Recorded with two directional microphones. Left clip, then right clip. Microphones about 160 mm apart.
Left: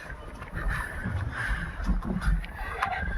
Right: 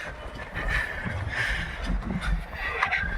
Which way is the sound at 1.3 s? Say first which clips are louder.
Right 5 dB; 25° left (ahead or behind).